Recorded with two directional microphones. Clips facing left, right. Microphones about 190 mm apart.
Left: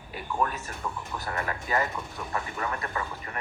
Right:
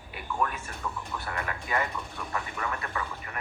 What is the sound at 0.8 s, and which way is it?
Speech, 15° left (ahead or behind).